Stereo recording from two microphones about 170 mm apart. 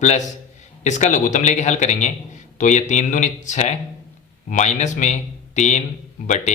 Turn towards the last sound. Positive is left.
turn(degrees=45)  # may be behind; listen again after turning